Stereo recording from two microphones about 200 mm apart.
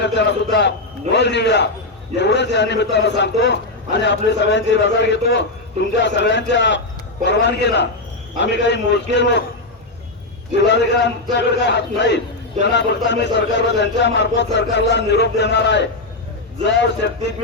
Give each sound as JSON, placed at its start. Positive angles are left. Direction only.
{"t": 0.0, "sound": "a man's voice", "side_deg": 60}
{"t": 10.6, "sound": "a man's voice", "side_deg": 60}